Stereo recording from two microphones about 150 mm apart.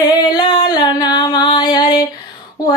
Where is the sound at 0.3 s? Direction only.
35° left (ahead or behind).